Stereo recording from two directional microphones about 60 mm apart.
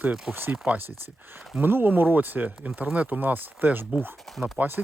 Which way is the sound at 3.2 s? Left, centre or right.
Right.